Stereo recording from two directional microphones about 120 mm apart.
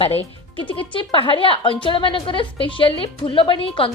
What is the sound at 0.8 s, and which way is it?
A woman's voice, 45° left (ahead or behind).